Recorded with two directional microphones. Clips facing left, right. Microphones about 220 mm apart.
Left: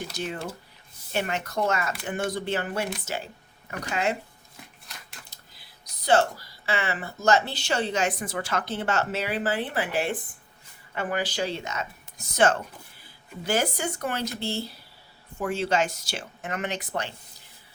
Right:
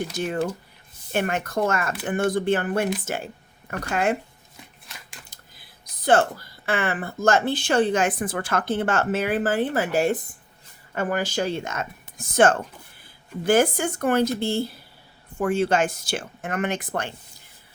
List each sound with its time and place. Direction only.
1.1 s speech: 55° right (ahead or behind)
4.9 s a sound: centre (ahead or behind)
5.3 s speech: 50° right (ahead or behind)